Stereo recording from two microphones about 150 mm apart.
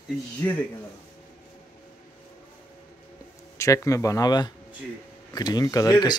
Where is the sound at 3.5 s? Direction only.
20° left (ahead or behind).